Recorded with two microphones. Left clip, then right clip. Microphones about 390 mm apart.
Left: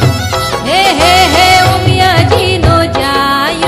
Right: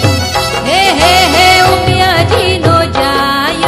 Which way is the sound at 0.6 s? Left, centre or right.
Centre.